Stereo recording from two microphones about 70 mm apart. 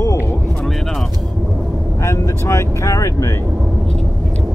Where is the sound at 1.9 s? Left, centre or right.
Left.